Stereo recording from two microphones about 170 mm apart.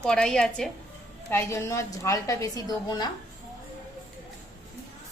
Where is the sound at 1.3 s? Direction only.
15° left (ahead or behind).